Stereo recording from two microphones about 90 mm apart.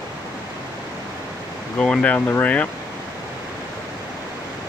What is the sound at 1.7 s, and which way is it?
Speech, 10° left (ahead or behind).